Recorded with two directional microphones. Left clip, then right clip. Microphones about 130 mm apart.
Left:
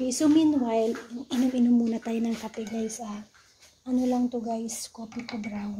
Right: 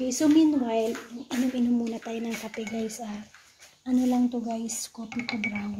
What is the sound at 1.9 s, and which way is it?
Speech, 40° left (ahead or behind).